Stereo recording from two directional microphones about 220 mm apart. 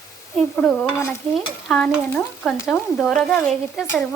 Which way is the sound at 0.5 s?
5° left (ahead or behind).